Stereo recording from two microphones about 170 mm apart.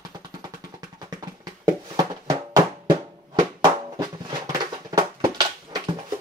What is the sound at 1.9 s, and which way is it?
Music, 20° right (ahead or behind).